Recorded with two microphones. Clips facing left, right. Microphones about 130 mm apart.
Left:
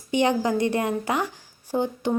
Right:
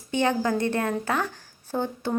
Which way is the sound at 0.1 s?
15° left (ahead or behind).